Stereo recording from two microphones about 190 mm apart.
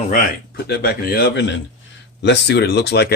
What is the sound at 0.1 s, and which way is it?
Speech, 55° left (ahead or behind).